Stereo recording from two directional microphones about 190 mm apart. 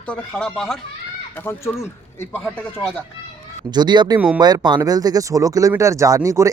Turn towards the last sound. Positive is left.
turn(degrees=-15)  # may be behind; listen again after turning